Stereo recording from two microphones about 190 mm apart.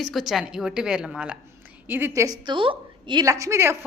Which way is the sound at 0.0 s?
Centre (ahead or behind).